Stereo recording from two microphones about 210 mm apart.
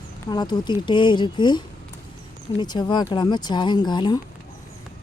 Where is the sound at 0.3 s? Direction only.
20° left (ahead or behind).